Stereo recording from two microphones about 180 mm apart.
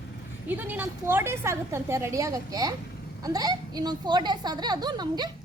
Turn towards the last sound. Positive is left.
turn(degrees=-25)  # may be behind; listen again after turning